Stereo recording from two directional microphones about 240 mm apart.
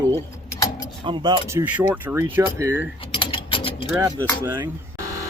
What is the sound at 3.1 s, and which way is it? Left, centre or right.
Mechanisms, left.